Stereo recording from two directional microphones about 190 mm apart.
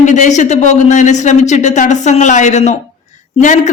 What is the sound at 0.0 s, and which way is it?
A woman's voice, 40° left (ahead or behind).